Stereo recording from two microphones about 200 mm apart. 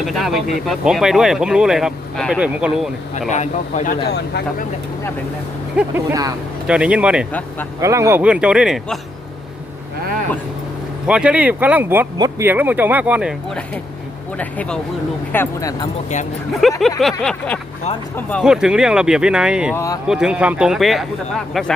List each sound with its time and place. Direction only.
0.0 s speech: centre (ahead or behind)
3.2 s a man's voice: 35° left (ahead or behind)
4.0 s speech: 55° left (ahead or behind)
5.7 s speech: 15° right (ahead or behind)
11.0 s speech: 5° right (ahead or behind)
12.1 s speech: 20° right (ahead or behind)
12.5 s speech: 10° right (ahead or behind); by 15.7 s 10° left (ahead or behind)
16.6 s speech: centre (ahead or behind)
19.7 s speech: 15° left (ahead or behind)
20.1 s speech: 5° right (ahead or behind)